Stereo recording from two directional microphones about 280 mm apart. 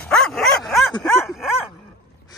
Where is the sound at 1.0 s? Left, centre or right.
Centre.